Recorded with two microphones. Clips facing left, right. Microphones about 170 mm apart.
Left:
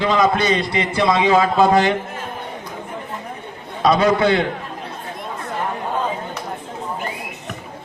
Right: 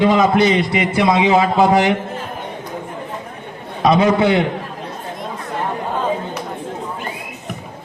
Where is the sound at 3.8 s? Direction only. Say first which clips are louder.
Right 2 dB; 20° right (ahead or behind).